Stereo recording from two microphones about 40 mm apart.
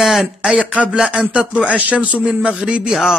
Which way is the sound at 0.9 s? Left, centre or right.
Right.